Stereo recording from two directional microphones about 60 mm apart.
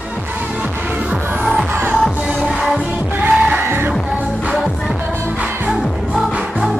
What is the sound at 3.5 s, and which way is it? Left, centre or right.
Music, right.